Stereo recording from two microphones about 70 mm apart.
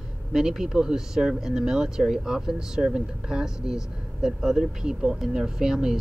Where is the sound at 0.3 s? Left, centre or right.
Centre.